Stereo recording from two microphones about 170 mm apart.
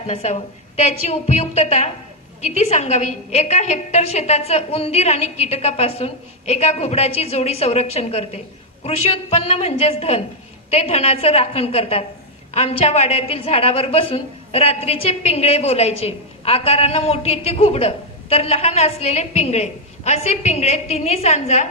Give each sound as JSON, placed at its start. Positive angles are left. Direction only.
{"t": 0.1, "sound": "a woman's voice", "side_deg": 35}